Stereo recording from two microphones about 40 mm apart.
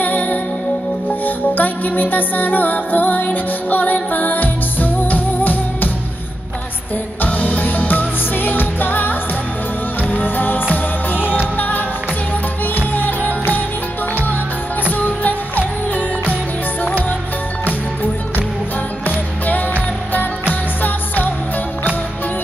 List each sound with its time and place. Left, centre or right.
0.0 s music: left
7.2 s music: left
14.9 s music: left
19.0 s music: left